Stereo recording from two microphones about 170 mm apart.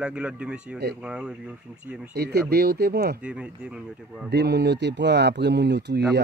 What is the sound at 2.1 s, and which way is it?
Speech, 70° right (ahead or behind).